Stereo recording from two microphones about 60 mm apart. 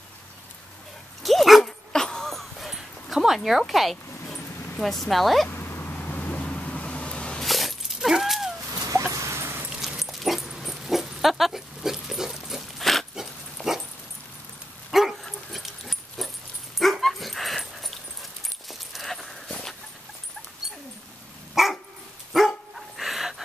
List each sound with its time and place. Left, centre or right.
1.2 s dog: centre
1.9 s a sound: centre
3.4 s speech: centre
5.5 s a sound: left; by 7.4 s centre
7.4 s dog: centre
9.1 s dog: right
9.7 s dog: centre
13.6 s dog: centre
14.9 s dog: centre
18.7 s keys jangling: centre
21.6 s dog: centre